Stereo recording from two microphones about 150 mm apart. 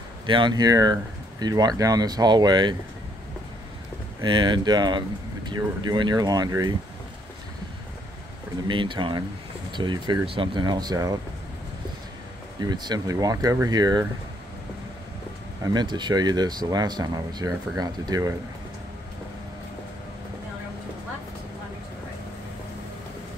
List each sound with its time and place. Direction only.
0.3 s speech: 30° right (ahead or behind)
4.2 s speech: 30° right (ahead or behind)
8.6 s speech: 35° right (ahead or behind)
12.5 s speech: 25° right (ahead or behind)
15.6 s speech: 30° right (ahead or behind)